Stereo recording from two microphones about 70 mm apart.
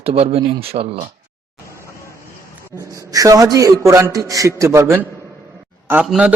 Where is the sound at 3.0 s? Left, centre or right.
Right.